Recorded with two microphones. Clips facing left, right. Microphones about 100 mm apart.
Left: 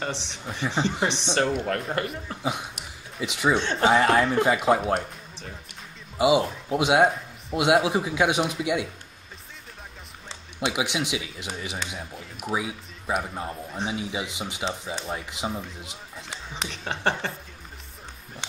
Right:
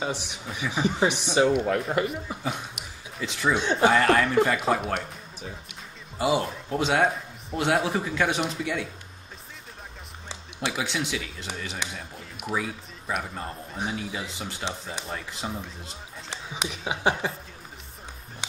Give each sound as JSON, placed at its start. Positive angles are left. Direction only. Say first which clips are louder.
{"t": 0.0, "sound": "a woman's voice", "louder": "right 1 dB", "side_deg": -10}
{"t": 3.2, "sound": "a man's voice", "louder": "left 2 dB", "side_deg": 15}
{"t": 6.1, "sound": "a man's voice", "louder": "left 4 dB", "side_deg": 15}
{"t": 10.6, "sound": "a man's voice", "louder": "left 2 dB", "side_deg": 15}
{"t": 16.4, "sound": "a woman's voice", "louder": "right 2 dB", "side_deg": -10}